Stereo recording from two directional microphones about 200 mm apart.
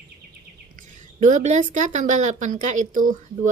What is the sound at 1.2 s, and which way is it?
A woman's voice, 35° right (ahead or behind).